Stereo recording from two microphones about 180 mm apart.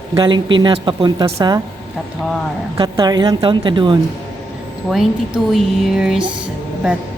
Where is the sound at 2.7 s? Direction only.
25° right (ahead or behind).